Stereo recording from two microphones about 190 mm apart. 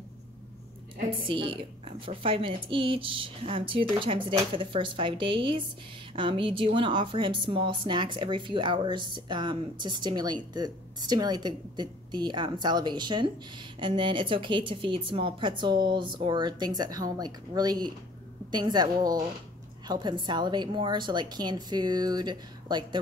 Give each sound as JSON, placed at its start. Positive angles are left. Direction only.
{"t": 1.2, "sound": "a woman's voice", "side_deg": -25}